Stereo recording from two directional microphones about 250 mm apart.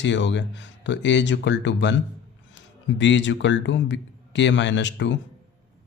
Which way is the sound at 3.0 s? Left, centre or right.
Left.